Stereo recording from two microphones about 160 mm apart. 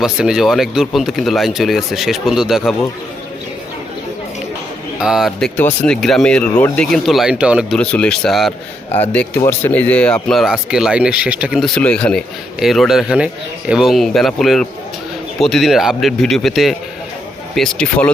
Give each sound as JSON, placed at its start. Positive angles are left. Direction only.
{"t": 0.0, "sound": "speech", "side_deg": -5}
{"t": 4.9, "sound": "speech", "side_deg": -5}
{"t": 5.5, "sound": "speech", "side_deg": 10}
{"t": 7.8, "sound": "speech", "side_deg": 5}
{"t": 9.5, "sound": "speech", "side_deg": 10}